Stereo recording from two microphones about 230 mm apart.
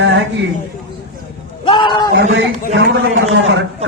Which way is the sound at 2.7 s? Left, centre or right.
Right.